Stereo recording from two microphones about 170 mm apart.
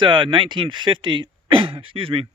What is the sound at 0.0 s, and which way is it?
Speech, 30° right (ahead or behind).